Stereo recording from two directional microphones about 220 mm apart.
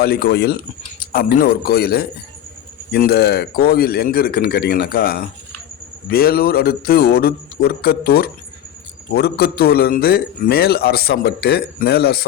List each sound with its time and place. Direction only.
0.0 s a man's voice: 45° left (ahead or behind)